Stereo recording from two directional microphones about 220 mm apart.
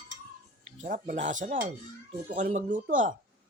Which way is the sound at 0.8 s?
35° right (ahead or behind).